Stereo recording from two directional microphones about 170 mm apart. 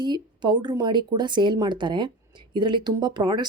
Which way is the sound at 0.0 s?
25° right (ahead or behind).